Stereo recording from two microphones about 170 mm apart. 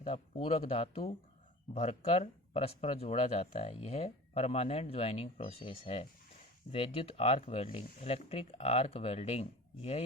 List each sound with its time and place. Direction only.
0.0 s speech: 35° left (ahead or behind)